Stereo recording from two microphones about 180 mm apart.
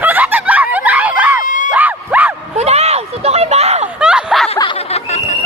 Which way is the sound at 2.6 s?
35° right (ahead or behind).